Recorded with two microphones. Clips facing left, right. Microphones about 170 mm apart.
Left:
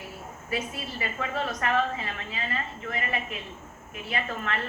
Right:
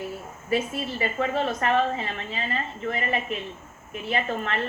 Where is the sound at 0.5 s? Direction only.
30° right (ahead or behind).